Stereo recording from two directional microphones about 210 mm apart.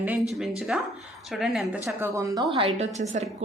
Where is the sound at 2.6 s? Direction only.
30° right (ahead or behind).